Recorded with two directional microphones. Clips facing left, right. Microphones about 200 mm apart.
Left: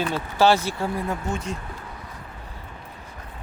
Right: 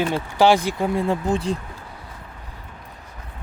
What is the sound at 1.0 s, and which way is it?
Speech, 30° right (ahead or behind).